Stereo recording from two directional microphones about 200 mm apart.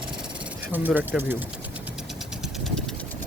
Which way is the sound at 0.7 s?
10° right (ahead or behind).